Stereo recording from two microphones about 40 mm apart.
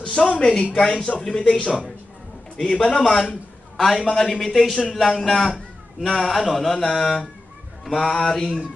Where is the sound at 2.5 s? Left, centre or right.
Centre.